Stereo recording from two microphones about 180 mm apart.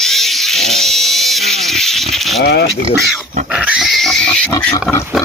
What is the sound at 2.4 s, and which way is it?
Speech, 65° left (ahead or behind).